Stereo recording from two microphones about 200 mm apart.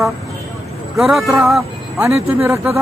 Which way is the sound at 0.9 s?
5° right (ahead or behind).